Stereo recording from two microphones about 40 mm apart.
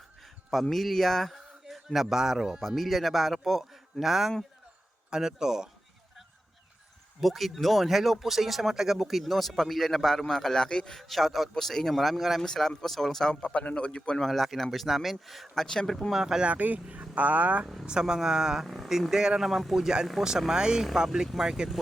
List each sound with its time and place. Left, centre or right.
0.6 s a man's voice: centre
1.6 s a sound: centre
2.1 s speech: centre
7.2 s a man's voice: centre; by 10.9 s left
10.9 s a man's voice: centre
13.3 s a man's voice: left
14.2 s speech: centre
15.6 s a man's voice: centre
16.1 s speech: centre
16.4 s speech: right
18.0 s speech: centre
19.5 s speech: centre
19.7 s speech: centre